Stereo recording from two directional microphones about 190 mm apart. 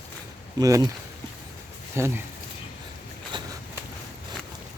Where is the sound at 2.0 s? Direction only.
15° right (ahead or behind).